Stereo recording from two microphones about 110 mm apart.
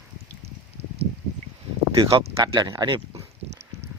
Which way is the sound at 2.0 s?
45° right (ahead or behind).